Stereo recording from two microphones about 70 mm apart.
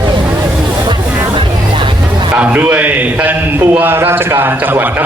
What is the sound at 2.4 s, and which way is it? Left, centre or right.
A man's voice, right.